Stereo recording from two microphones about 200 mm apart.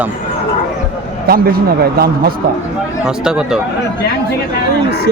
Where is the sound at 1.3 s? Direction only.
50° right (ahead or behind).